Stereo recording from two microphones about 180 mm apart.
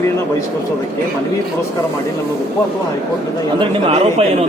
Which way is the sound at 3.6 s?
35° right (ahead or behind).